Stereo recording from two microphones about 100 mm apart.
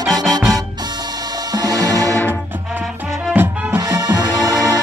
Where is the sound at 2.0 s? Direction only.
25° left (ahead or behind).